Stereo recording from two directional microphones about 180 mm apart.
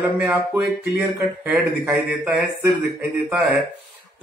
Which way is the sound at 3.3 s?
Centre (ahead or behind).